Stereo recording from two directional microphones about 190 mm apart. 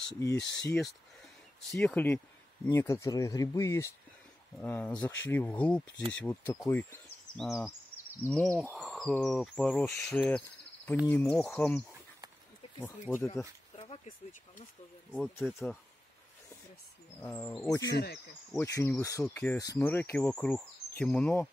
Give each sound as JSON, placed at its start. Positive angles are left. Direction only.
{"t": 0.5, "sound": "speech", "side_deg": 70}
{"t": 1.7, "sound": "insect", "side_deg": 5}
{"t": 2.6, "sound": "speech", "side_deg": 15}
{"t": 7.4, "sound": "insect", "side_deg": 0}
{"t": 8.5, "sound": "speech", "side_deg": 0}
{"t": 9.1, "sound": "insect", "side_deg": 0}
{"t": 11.1, "sound": "speech", "side_deg": 10}
{"t": 12.8, "sound": "speech", "side_deg": 10}
{"t": 15.4, "sound": "insect", "side_deg": 0}
{"t": 17.2, "sound": "speech", "side_deg": 10}
{"t": 17.8, "sound": "speech", "side_deg": 60}
{"t": 18.5, "sound": "speech", "side_deg": 15}